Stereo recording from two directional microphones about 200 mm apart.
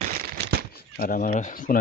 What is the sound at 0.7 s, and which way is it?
Speech, 45° left (ahead or behind).